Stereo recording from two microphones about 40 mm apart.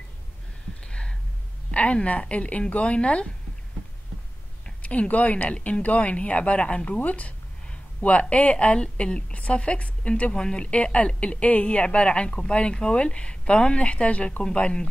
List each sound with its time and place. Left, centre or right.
0.8 s a sound: left
1.7 s speech: left
4.8 s speech: left
7.0 s speech: left
9.3 s speech: left
10.3 s speech: left